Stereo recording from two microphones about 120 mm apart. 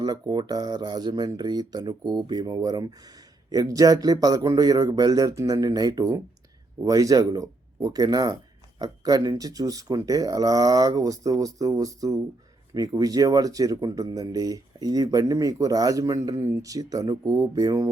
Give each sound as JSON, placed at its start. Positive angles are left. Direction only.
{"t": 0.0, "sound": "speech", "side_deg": -35}